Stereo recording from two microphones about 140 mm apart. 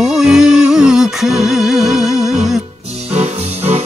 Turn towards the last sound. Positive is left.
turn(degrees=-50)  # may be behind; listen again after turning